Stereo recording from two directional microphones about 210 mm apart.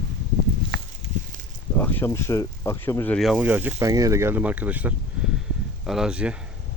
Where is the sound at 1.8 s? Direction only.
10° left (ahead or behind).